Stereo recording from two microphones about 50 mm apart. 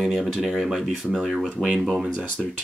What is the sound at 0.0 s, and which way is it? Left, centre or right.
Speech, centre.